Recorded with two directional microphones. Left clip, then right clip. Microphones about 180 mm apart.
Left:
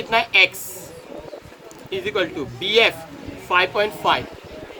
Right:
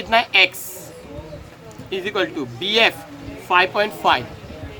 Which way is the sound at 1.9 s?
60° right (ahead or behind).